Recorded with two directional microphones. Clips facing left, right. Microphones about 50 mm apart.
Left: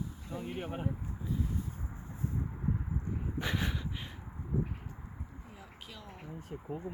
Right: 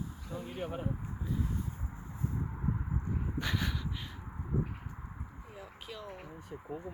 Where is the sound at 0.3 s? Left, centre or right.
Centre.